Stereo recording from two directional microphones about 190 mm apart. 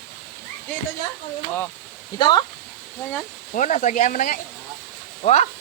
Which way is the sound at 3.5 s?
40° left (ahead or behind).